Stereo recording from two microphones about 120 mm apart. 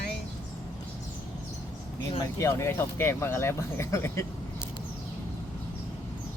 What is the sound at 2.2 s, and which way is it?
Speech, 25° left (ahead or behind).